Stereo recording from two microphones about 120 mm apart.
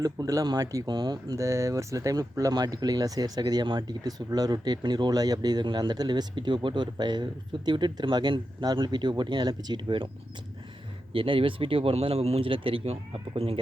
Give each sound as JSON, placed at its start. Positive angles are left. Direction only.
{"t": 0.0, "sound": "speech", "side_deg": -30}
{"t": 11.1, "sound": "speech", "side_deg": -50}